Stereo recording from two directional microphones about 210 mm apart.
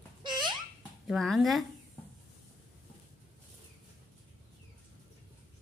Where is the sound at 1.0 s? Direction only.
Centre (ahead or behind).